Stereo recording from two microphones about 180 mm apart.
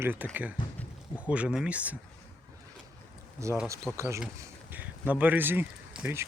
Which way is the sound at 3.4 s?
15° right (ahead or behind).